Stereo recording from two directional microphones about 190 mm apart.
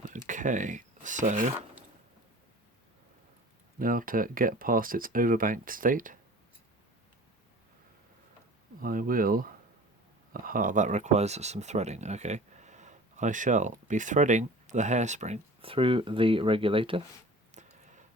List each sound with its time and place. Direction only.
0.3 s speech: 40° right (ahead or behind)
3.8 s speech: 45° right (ahead or behind)
8.8 s speech: 50° right (ahead or behind); by 17.0 s 30° right (ahead or behind)
17.5 s a sound: 40° right (ahead or behind)